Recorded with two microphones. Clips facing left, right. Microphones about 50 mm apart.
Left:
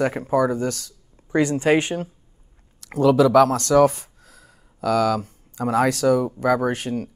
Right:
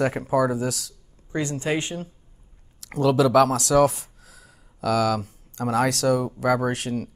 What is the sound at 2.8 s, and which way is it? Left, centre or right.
Speech, centre.